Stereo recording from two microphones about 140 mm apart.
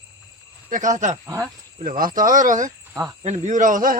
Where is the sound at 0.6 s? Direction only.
65° right (ahead or behind).